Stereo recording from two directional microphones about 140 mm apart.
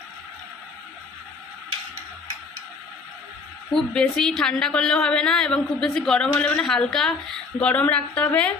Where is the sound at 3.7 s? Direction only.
5° left (ahead or behind).